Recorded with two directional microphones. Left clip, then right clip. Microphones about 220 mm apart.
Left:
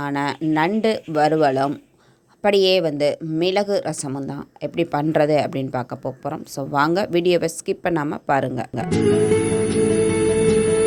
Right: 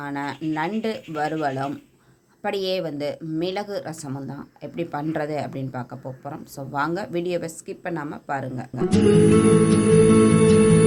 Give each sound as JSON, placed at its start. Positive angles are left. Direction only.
{"t": 0.0, "sound": "a woman's voice", "side_deg": 35}
{"t": 9.0, "sound": "music", "side_deg": 0}